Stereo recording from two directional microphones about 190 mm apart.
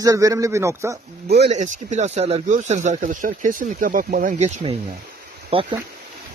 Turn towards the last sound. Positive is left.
turn(degrees=-30)  # may be behind; listen again after turning